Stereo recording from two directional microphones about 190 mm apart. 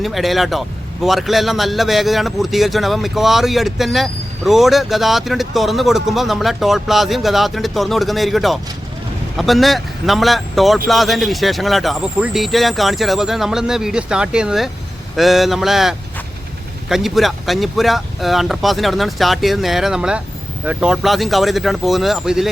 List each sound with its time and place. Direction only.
0.0 s a man's voice: centre (ahead or behind)